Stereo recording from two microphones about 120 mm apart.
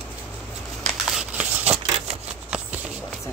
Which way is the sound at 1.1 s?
10° right (ahead or behind).